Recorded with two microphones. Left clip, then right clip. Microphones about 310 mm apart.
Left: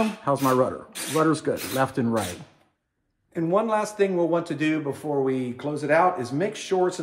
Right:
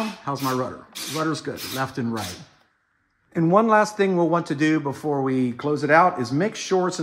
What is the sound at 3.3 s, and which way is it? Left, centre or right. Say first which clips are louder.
Speech: right 5 dB; right.